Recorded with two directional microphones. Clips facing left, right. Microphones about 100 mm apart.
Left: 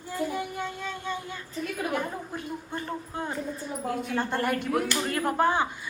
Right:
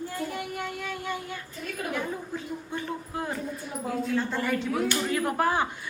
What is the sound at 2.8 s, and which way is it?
Child singing, 25° left (ahead or behind).